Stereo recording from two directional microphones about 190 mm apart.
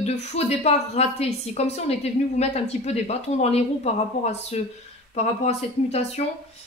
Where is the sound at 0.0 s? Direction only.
35° left (ahead or behind).